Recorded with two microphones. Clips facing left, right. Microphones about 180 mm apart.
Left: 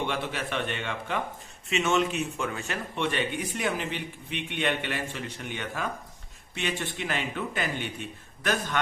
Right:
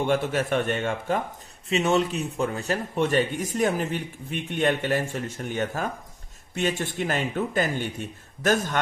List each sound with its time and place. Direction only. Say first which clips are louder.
0.1 s a man's voice: right 8 dB; 45° right (ahead or behind)